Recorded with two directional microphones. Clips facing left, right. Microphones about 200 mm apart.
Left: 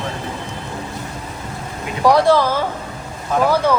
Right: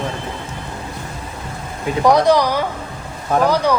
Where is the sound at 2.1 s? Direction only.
20° right (ahead or behind).